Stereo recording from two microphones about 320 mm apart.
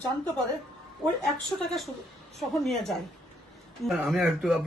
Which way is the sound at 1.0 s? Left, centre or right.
Centre.